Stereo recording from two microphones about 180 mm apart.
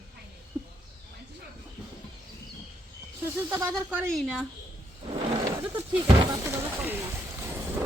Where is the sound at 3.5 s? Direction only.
10° right (ahead or behind).